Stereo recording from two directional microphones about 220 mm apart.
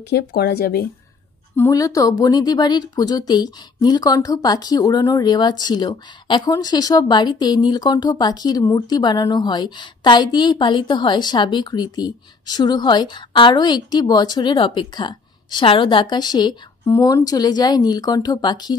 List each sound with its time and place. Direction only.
0.1 s speech: 45° left (ahead or behind)
1.6 s speech: 15° left (ahead or behind)